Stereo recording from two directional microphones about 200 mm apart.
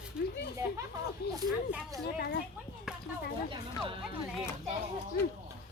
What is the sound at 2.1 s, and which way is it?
Speech, 50° left (ahead or behind).